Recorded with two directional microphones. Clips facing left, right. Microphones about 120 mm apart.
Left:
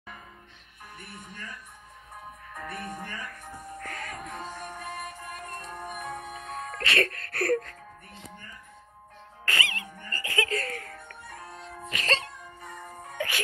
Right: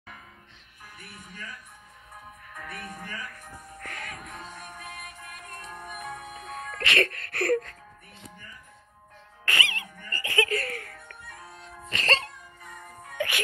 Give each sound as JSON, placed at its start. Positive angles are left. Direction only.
{"t": 2.6, "sound": "speech", "side_deg": 30}
{"t": 4.0, "sound": "music", "side_deg": 30}
{"t": 9.4, "sound": "music", "side_deg": 30}
{"t": 11.9, "sound": "speech", "side_deg": 5}
{"t": 12.6, "sound": "music", "side_deg": 30}